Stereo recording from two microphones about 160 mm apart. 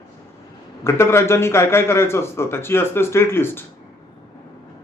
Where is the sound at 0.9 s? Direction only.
15° left (ahead or behind).